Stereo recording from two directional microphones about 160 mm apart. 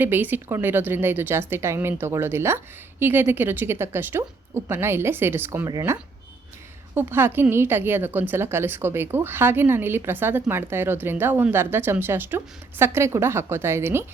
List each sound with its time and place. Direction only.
0.0 s a woman's voice: 10° right (ahead or behind)